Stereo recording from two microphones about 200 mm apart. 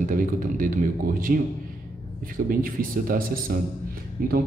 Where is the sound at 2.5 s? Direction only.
45° right (ahead or behind).